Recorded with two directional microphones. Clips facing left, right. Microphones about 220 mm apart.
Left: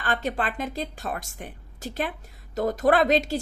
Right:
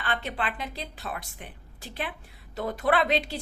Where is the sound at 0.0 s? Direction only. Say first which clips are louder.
Left 4 dB; 45° left (ahead or behind).